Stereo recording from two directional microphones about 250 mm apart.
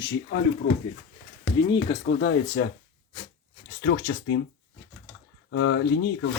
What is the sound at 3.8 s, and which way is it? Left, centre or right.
Speech, left.